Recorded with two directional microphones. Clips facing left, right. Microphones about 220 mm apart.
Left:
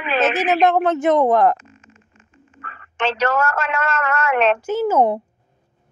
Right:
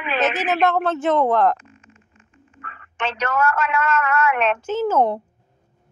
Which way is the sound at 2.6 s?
35° left (ahead or behind).